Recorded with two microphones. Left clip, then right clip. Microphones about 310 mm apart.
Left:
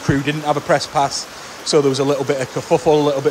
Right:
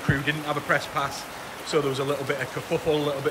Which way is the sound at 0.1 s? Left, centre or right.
Centre.